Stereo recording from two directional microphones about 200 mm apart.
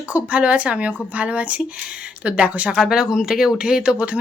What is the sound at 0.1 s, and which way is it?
Speech, 5° right (ahead or behind).